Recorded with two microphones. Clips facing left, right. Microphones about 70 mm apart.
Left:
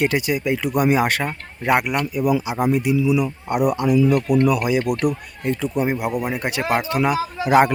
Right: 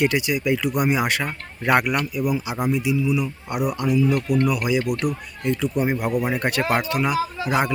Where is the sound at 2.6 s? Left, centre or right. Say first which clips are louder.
Left 3 dB; left.